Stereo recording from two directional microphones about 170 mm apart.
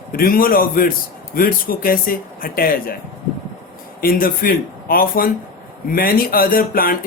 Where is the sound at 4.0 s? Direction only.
60° left (ahead or behind).